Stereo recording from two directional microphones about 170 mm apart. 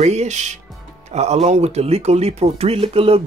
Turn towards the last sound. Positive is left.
turn(degrees=-35)  # may be behind; listen again after turning